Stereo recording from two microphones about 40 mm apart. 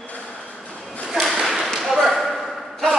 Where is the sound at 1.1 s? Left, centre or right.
Centre.